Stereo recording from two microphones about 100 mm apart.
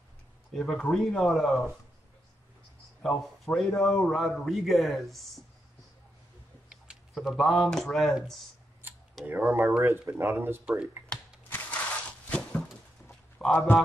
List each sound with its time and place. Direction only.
0.5 s a man's voice: 5° left (ahead or behind)
3.0 s a man's voice: 5° left (ahead or behind)
6.7 s a man's voice: 5° right (ahead or behind)
9.2 s speech: 20° right (ahead or behind)
10.6 s speech: 10° right (ahead or behind)
11.1 s shuffling cards: 10° left (ahead or behind)
11.4 s a sound: 20° left (ahead or behind)
12.3 s a sound: 10° left (ahead or behind)